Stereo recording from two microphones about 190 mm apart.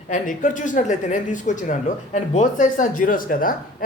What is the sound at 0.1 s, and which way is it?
Speech, 45° left (ahead or behind).